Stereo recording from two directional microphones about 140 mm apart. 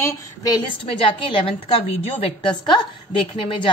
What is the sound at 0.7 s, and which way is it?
A woman's voice, 40° left (ahead or behind).